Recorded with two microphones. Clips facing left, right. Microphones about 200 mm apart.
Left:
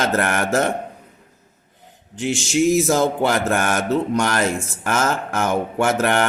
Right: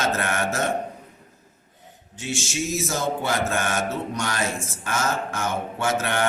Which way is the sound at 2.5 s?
60° left (ahead or behind).